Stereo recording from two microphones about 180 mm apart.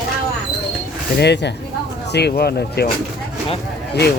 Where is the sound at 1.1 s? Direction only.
70° left (ahead or behind).